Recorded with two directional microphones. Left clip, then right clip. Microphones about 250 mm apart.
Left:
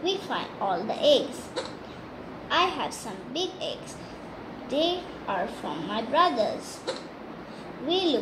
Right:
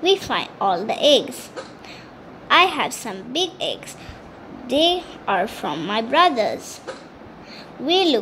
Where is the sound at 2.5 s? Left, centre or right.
Right.